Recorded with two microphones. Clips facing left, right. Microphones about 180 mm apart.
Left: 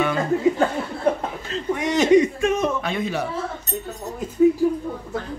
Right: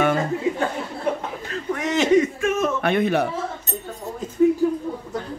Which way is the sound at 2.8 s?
60° right (ahead or behind).